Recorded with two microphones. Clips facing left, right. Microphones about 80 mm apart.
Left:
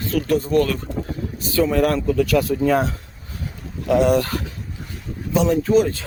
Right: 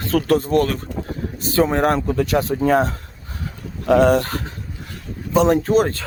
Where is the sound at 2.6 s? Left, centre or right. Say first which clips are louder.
Right 2 dB; right.